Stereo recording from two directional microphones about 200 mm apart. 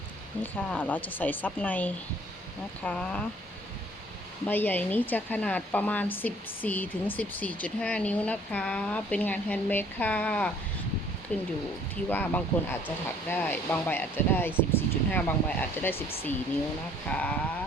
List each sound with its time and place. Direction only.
0.4 s speech: 10° left (ahead or behind)
4.4 s speech: 10° left (ahead or behind)
17.1 s speech: 5° left (ahead or behind)